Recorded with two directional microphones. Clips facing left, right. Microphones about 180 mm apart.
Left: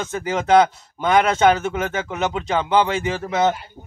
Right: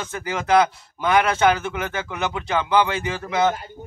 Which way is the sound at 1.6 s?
25° left (ahead or behind).